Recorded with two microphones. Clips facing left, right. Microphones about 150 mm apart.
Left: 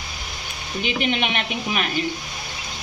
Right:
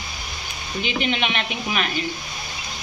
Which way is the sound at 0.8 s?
50° left (ahead or behind).